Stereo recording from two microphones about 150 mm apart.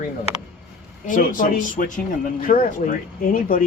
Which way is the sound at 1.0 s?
60° left (ahead or behind).